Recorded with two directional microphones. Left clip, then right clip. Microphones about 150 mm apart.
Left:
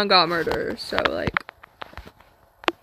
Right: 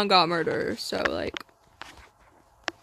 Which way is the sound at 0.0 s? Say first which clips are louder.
Left 3 dB; 25° right (ahead or behind).